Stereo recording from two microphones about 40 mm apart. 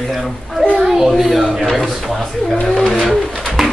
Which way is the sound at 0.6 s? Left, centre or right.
Centre.